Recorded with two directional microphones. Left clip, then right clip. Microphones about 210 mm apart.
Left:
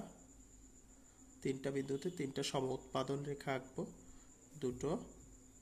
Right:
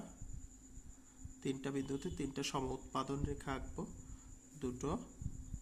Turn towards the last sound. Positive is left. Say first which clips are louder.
# left 2 dB
turn(degrees=5)  # may be behind; listen again after turning